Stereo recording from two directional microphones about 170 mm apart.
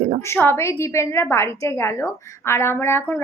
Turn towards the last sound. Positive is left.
turn(degrees=15)  # may be behind; listen again after turning